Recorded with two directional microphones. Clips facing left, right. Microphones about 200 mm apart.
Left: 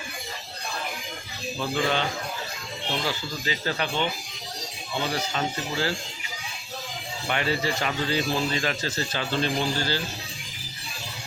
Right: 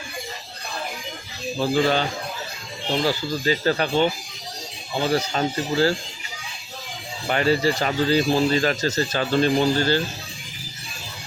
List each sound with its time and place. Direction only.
1.5 s speech: 35° right (ahead or behind)
5.1 s speech: 40° right (ahead or behind)
7.3 s speech: 40° right (ahead or behind)